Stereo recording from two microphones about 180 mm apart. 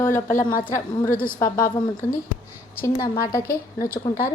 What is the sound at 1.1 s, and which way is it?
Speech, 50° left (ahead or behind).